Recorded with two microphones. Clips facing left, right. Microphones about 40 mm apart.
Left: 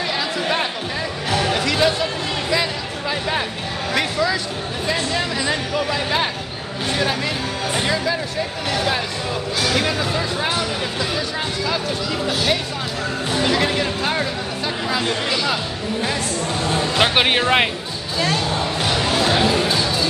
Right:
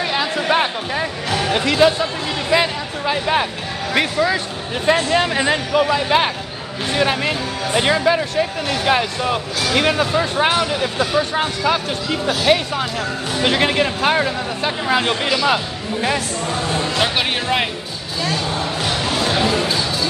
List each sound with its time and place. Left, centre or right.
0.0 s chatter: right
1.5 s speech: right
2.5 s a sound: right
3.9 s speech: right
4.8 s speech: right
14.1 s speech: right
14.9 s speech: right
16.9 s speech: left
19.1 s speech: centre
19.4 s speech: centre